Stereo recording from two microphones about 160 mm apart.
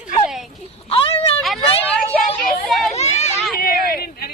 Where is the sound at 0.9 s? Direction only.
35° left (ahead or behind).